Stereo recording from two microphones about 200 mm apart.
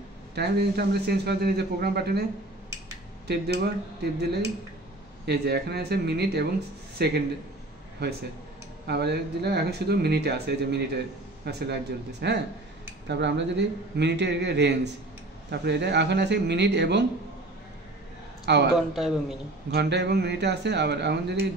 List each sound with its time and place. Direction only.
0.3 s a man's voice: 55° right (ahead or behind)
3.3 s speech: 55° right (ahead or behind)
5.2 s speech: 55° right (ahead or behind)
18.4 s speech: 55° right (ahead or behind)
18.9 s a man's voice: centre (ahead or behind)
19.7 s speech: 55° right (ahead or behind)